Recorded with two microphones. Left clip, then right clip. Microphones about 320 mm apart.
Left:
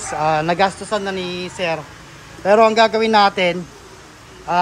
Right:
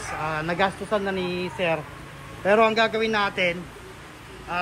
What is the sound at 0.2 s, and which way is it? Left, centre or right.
Speech, centre.